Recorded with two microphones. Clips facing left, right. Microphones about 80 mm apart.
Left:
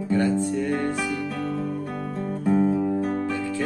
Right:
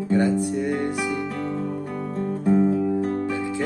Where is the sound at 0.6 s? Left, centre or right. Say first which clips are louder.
Right 1 dB; centre.